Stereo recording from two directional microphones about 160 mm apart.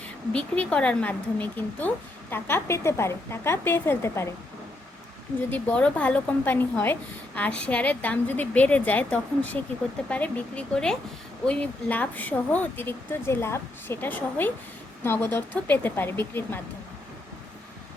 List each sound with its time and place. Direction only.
0.0 s speech: 10° left (ahead or behind)
5.5 s speech: 10° left (ahead or behind)